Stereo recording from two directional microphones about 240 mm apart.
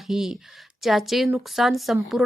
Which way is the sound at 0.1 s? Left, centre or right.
Centre.